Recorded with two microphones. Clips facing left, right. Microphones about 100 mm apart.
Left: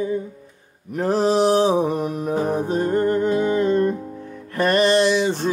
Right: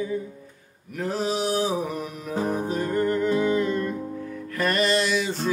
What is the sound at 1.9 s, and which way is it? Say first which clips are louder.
Music: left 9 dB; 50° left (ahead or behind).